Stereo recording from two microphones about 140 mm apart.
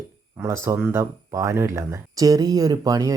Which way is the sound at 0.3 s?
20° right (ahead or behind).